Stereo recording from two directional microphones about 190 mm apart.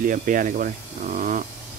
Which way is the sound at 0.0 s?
45° right (ahead or behind).